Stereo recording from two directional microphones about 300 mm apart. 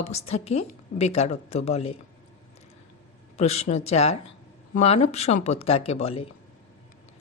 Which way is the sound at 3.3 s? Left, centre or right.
Left.